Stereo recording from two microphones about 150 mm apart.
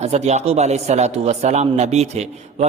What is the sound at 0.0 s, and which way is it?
Speech, 45° right (ahead or behind).